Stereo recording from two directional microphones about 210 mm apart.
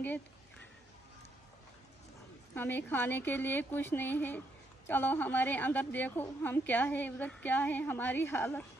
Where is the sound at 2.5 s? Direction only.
10° left (ahead or behind).